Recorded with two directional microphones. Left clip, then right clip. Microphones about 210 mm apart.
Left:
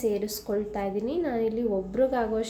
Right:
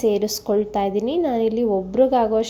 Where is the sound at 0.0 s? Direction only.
30° right (ahead or behind).